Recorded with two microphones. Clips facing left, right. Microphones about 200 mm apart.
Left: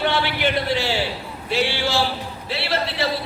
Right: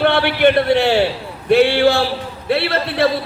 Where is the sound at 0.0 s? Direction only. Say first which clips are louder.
Right 8 dB; 60° right (ahead or behind).